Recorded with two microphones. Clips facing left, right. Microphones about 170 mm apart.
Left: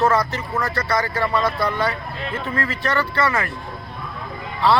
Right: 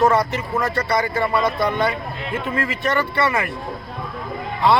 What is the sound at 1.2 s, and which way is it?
Speech, 15° right (ahead or behind).